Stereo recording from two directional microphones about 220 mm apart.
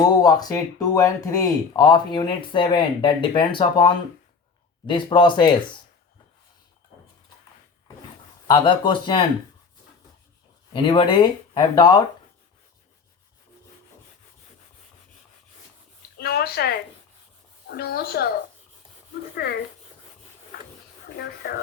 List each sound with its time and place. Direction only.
0.0 s speech: 15° left (ahead or behind)
8.4 s speech: 20° left (ahead or behind)
10.7 s speech: 25° left (ahead or behind)
16.1 s a sound: 45° left (ahead or behind)
17.7 s a woman's voice: 45° left (ahead or behind)
19.4 s a woman's voice: 45° left (ahead or behind)
21.4 s a woman's voice: 45° left (ahead or behind)